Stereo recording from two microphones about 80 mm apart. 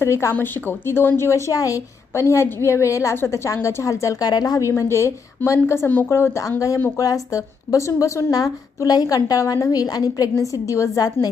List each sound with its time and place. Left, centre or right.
0.0 s a woman's voice: left
4.8 s a woman's voice: left